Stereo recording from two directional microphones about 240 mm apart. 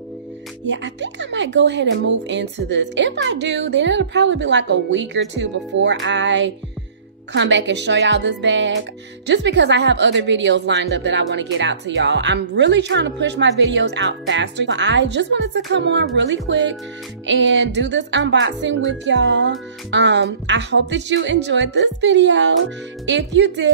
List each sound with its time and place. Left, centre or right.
0.7 s a woman's voice: right